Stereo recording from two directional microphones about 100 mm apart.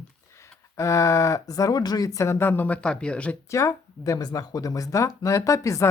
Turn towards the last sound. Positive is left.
turn(degrees=30)  # may be behind; listen again after turning